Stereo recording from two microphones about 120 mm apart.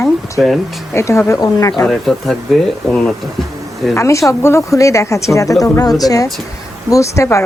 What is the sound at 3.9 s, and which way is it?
Speech, 25° left (ahead or behind).